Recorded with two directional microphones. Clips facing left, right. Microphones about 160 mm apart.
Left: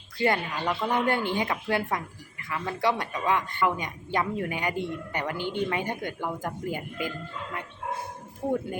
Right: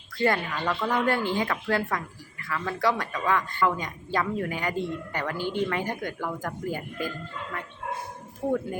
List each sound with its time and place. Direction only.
0.2 s a woman's voice: 20° left (ahead or behind)
8.4 s a woman's voice: 20° left (ahead or behind)